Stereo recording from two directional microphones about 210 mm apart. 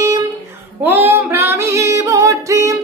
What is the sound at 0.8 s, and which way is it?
Female singing, 10° right (ahead or behind).